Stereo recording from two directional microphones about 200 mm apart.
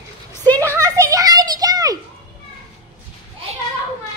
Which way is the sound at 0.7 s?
15° right (ahead or behind).